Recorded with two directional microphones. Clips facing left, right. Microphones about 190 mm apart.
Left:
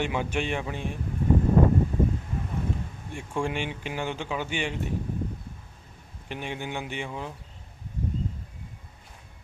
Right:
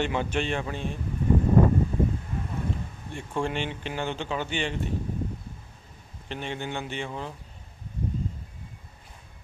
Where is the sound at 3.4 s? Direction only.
10° left (ahead or behind).